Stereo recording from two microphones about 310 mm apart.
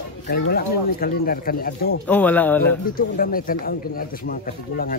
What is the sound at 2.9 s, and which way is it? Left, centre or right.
Speech, left.